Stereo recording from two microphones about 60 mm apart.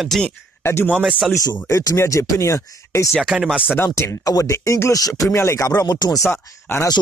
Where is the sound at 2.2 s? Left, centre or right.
Left.